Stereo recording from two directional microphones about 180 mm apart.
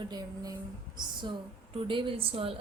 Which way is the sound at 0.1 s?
20° right (ahead or behind).